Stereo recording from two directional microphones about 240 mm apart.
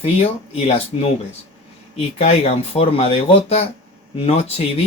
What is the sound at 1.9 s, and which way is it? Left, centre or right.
Speech, left.